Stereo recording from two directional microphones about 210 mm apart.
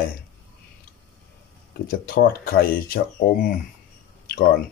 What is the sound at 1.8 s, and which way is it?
Speech, 45° left (ahead or behind).